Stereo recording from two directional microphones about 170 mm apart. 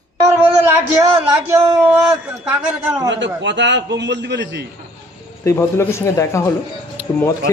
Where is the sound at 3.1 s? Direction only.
90° right.